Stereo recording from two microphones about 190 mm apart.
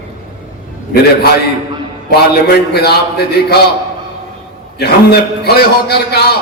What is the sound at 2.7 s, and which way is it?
Speech, 60° left (ahead or behind).